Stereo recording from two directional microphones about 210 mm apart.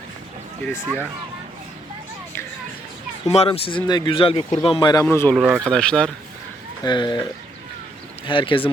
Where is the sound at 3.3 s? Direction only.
30° left (ahead or behind).